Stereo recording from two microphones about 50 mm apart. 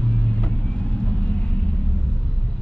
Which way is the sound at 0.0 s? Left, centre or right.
Centre.